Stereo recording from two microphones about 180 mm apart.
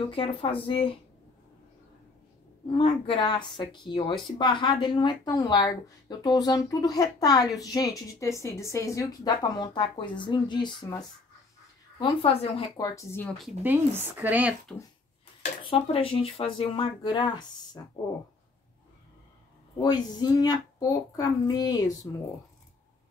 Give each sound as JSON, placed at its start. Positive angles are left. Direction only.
{"t": 0.1, "sound": "a woman's voice", "side_deg": 30}
{"t": 2.7, "sound": "a woman's voice", "side_deg": 30}
{"t": 12.7, "sound": "speech", "side_deg": 20}
{"t": 13.6, "sound": "speech", "side_deg": -10}
{"t": 15.6, "sound": "a woman's voice", "side_deg": 30}
{"t": 19.8, "sound": "a woman's voice", "side_deg": 25}